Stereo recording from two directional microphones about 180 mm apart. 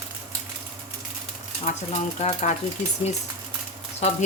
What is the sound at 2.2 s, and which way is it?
Speech, 35° left (ahead or behind).